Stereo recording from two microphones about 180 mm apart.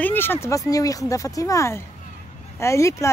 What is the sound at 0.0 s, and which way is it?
Speech, 10° left (ahead or behind).